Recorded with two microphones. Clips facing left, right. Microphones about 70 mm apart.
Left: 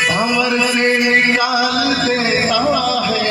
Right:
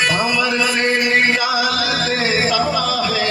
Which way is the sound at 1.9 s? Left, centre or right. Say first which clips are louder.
Left 2 dB; left.